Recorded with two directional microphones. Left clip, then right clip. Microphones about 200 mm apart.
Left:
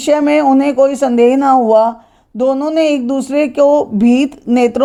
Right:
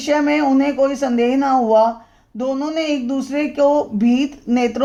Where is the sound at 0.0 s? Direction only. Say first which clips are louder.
Left 6 dB; 35° left (ahead or behind).